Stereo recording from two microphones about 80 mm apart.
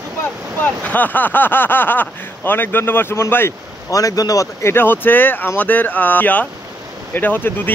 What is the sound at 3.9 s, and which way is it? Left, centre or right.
Speech, left.